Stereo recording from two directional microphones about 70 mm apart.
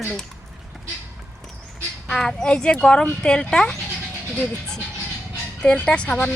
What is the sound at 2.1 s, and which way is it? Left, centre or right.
Speech, centre.